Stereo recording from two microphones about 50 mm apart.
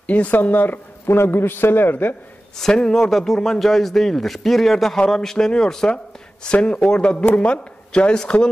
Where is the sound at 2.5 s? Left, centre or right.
Centre.